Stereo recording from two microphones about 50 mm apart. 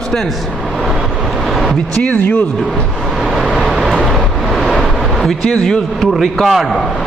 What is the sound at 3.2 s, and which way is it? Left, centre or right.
Vehicle, centre.